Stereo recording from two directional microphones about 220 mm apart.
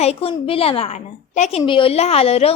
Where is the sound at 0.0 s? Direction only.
25° left (ahead or behind).